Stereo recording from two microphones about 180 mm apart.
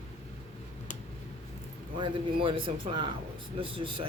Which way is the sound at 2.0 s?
30° right (ahead or behind).